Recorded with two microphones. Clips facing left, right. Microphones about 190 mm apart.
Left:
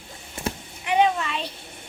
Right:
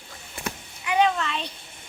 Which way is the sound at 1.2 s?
5° left (ahead or behind).